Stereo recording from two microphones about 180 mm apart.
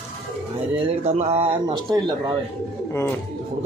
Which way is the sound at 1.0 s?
40° right (ahead or behind).